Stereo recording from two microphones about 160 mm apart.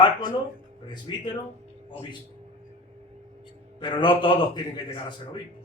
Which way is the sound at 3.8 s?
30° left (ahead or behind).